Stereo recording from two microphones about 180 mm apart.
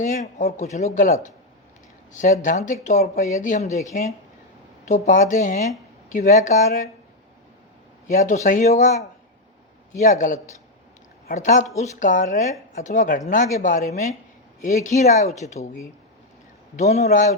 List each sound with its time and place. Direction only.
0.0 s speech: 45° left (ahead or behind)
4.9 s speech: 45° left (ahead or behind)
8.1 s speech: 45° left (ahead or behind)
16.7 s speech: 40° left (ahead or behind)